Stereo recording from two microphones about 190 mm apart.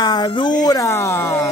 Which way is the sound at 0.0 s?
20° left (ahead or behind).